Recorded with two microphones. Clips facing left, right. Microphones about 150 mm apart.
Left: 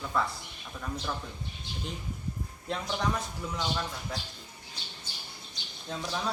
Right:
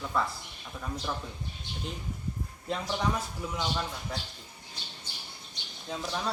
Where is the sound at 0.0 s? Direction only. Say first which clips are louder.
Even; centre (ahead or behind).